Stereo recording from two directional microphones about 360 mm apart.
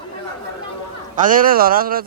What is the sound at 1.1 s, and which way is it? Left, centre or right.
Speech, right.